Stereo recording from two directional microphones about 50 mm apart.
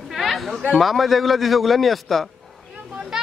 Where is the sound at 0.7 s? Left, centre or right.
Centre.